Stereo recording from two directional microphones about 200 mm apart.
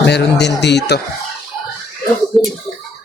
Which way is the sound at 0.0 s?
60° left (ahead or behind).